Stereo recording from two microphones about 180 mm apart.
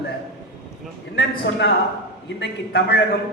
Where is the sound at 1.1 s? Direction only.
70° left (ahead or behind).